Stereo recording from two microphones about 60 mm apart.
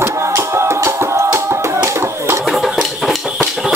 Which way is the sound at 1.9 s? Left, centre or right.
Right.